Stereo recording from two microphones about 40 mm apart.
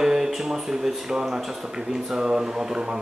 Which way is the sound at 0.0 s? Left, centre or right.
Centre.